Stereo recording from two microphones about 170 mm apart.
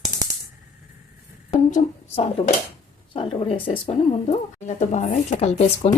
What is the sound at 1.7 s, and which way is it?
A woman's voice, 35° left (ahead or behind).